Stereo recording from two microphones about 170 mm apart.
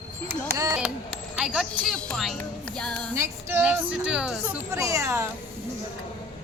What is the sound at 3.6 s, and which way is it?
Speech, 5° right (ahead or behind).